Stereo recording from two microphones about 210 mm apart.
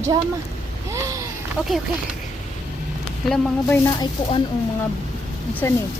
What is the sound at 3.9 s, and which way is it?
Speech, 20° left (ahead or behind).